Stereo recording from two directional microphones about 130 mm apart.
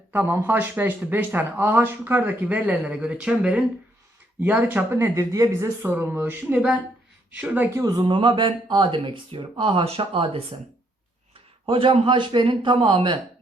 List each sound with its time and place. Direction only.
0.1 s speech: 15° right (ahead or behind)
7.8 s a man's voice: 30° right (ahead or behind)
8.1 s speech: 40° right (ahead or behind)
11.6 s speech: 45° right (ahead or behind)